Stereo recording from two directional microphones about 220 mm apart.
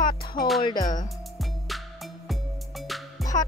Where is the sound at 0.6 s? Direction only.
20° left (ahead or behind).